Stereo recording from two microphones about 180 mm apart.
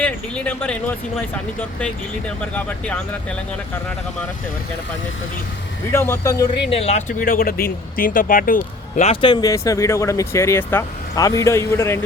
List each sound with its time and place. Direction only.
0.0 s speech: 10° left (ahead or behind)
5.9 s speech: 15° left (ahead or behind)
6.7 s speech: 35° left (ahead or behind)
9.2 s speech: 25° left (ahead or behind)